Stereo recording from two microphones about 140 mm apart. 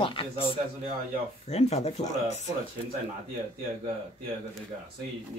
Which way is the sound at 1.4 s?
50° left (ahead or behind).